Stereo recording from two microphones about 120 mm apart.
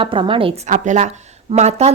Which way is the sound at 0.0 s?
45° right (ahead or behind).